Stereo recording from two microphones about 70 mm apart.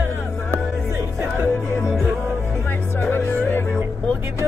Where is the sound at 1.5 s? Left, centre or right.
Left.